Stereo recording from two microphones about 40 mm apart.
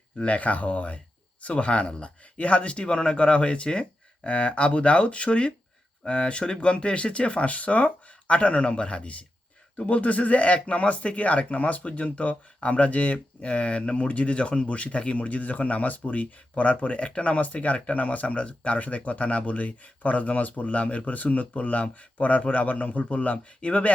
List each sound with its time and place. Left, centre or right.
0.2 s speech: left